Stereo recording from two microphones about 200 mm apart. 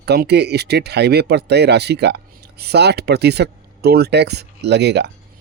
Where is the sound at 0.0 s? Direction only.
55° right (ahead or behind).